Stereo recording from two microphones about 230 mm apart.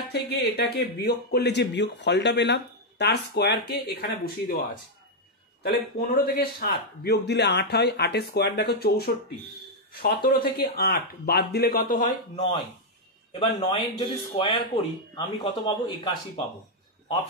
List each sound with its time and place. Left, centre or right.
0.1 s speech: left
5.6 s speech: left
13.3 s speech: left